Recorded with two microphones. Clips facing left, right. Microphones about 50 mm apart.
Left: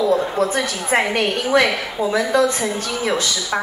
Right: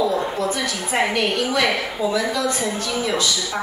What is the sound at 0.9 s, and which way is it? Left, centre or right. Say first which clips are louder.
Speech: left 2 dB; left.